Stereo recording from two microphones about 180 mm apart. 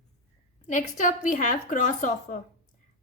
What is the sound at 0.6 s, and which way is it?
A woman's voice, 45° left (ahead or behind).